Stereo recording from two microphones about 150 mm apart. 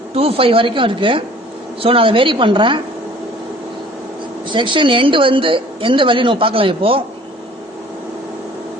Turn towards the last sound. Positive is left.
turn(degrees=-35)  # may be behind; listen again after turning